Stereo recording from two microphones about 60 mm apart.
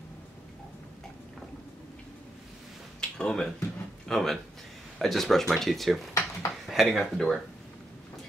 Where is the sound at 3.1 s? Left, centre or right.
Centre.